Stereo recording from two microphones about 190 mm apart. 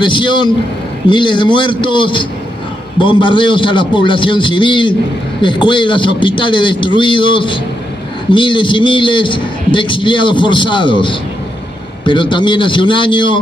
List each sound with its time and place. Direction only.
0.0 s a man's voice: 25° left (ahead or behind)